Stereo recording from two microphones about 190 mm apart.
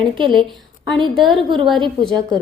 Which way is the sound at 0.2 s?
25° right (ahead or behind).